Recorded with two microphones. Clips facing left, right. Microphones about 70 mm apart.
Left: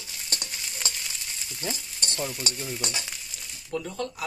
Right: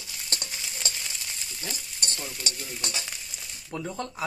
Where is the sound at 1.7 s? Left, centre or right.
Centre.